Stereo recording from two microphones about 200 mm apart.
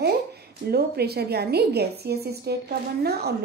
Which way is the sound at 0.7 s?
50° right (ahead or behind).